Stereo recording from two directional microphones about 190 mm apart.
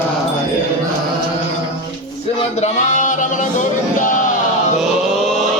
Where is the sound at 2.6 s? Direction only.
40° left (ahead or behind).